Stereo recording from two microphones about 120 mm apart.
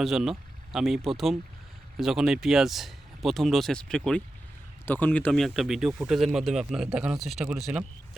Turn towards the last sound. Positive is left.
turn(degrees=-5)  # may be behind; listen again after turning